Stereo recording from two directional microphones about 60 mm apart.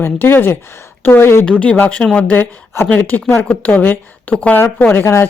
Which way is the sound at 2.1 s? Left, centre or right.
Left.